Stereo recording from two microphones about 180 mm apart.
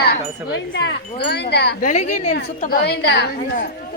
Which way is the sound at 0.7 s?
70° left (ahead or behind).